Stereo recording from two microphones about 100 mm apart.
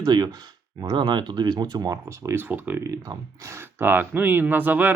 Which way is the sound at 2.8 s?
30° right (ahead or behind).